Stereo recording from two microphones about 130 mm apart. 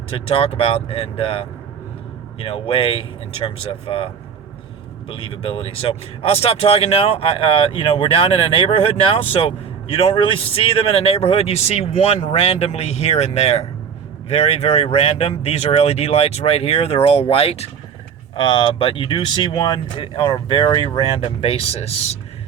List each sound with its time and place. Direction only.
0.1 s speech: 45° left (ahead or behind)
18.3 s speech: 35° left (ahead or behind); by 22.2 s 55° left (ahead or behind)